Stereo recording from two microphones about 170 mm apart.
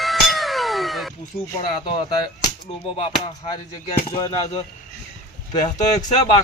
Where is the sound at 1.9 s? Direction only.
30° left (ahead or behind).